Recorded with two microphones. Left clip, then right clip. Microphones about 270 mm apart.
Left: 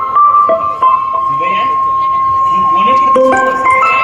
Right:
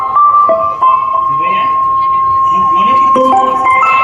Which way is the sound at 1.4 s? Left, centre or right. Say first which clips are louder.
Right 1 dB; centre.